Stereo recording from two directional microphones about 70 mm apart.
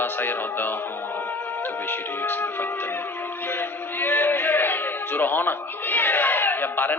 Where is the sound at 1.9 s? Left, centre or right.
Left.